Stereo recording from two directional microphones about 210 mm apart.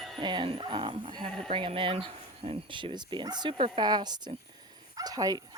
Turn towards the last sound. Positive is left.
turn(degrees=-20)  # may be behind; listen again after turning